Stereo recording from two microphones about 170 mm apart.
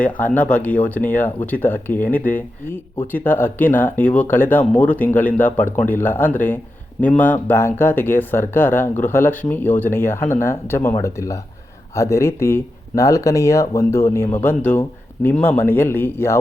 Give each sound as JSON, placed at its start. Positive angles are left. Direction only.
{"t": 0.3, "sound": "speech", "side_deg": 10}